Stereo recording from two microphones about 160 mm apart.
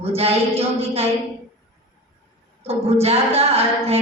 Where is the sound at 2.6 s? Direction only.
40° right (ahead or behind).